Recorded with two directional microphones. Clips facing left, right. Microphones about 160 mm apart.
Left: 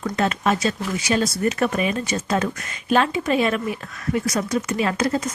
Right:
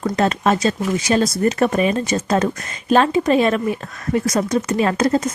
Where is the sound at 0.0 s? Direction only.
40° right (ahead or behind).